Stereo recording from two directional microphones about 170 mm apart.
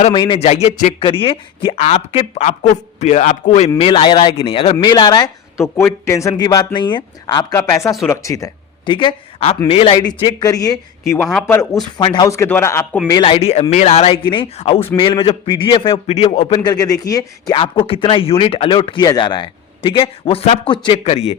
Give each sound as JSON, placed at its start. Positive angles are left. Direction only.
{"t": 0.0, "sound": "a man's voice", "side_deg": 30}
{"t": 7.3, "sound": "speech", "side_deg": 15}
{"t": 8.9, "sound": "speech", "side_deg": 30}
{"t": 11.9, "sound": "speech", "side_deg": 25}
{"t": 13.1, "sound": "speech", "side_deg": 25}
{"t": 16.6, "sound": "speech", "side_deg": 20}